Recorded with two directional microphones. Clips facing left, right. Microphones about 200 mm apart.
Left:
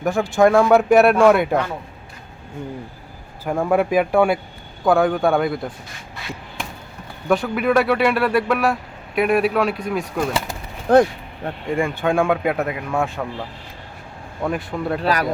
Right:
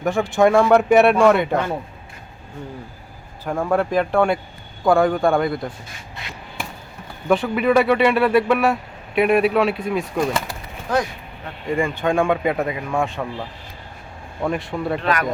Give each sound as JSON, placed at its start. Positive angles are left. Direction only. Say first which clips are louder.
{"t": 0.0, "sound": "speech", "louder": "left 1 dB", "side_deg": 0}
{"t": 3.4, "sound": "speech", "louder": "left 2 dB", "side_deg": 5}
{"t": 7.3, "sound": "speech", "louder": "right 1 dB", "side_deg": 0}
{"t": 10.5, "sound": "bird", "louder": "left 8 dB", "side_deg": 55}
{"t": 11.8, "sound": "speech", "louder": "even", "side_deg": 10}
{"t": 14.4, "sound": "speech", "louder": "even", "side_deg": 0}
{"t": 15.0, "sound": "speech", "louder": "left 3 dB", "side_deg": 35}